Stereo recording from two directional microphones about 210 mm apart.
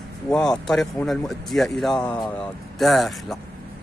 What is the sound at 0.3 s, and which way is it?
Speech, 5° left (ahead or behind).